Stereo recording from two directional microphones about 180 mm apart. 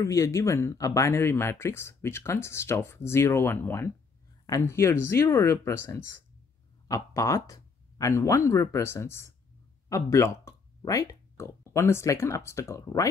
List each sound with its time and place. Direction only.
0.0 s speech: 15° left (ahead or behind)
5.9 s speech: 90° right
6.9 s speech: 20° left (ahead or behind)